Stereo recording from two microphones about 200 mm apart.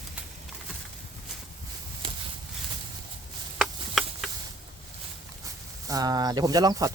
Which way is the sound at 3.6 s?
Centre (ahead or behind).